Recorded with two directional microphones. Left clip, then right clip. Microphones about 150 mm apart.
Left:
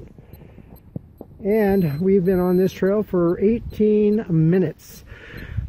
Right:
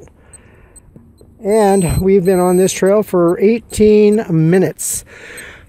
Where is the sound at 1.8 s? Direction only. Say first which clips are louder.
Right 7 dB; 25° right (ahead or behind).